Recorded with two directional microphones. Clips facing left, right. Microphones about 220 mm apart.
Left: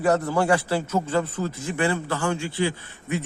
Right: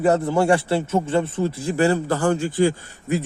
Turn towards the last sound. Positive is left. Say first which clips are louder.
# right 5 dB
turn(degrees=-40)  # may be behind; listen again after turning